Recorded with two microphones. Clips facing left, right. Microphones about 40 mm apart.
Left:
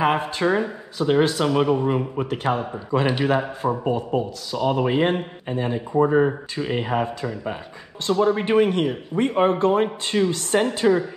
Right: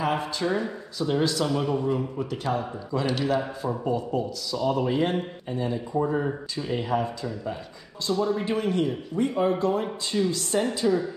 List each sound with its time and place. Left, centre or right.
0.0 s speech: left